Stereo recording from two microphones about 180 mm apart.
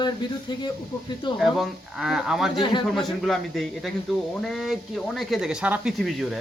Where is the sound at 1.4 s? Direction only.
Centre (ahead or behind).